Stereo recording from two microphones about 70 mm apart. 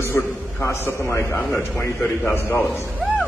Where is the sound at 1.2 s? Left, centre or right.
Left.